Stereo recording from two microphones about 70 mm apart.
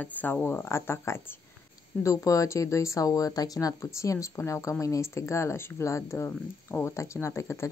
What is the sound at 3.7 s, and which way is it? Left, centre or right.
Speech, left.